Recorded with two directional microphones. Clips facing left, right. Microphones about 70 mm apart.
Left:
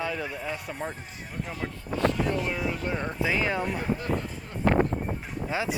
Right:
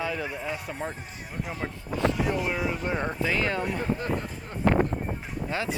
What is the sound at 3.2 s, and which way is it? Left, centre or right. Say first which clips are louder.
Speech: left 2 dB; centre.